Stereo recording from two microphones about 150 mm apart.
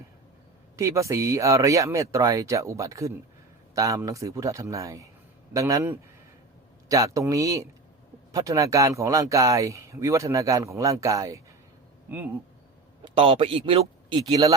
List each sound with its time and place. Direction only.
0.8 s speech: 20° right (ahead or behind)
13.1 s speech: 40° right (ahead or behind)